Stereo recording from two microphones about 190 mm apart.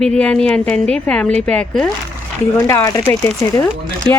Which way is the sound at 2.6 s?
15° left (ahead or behind).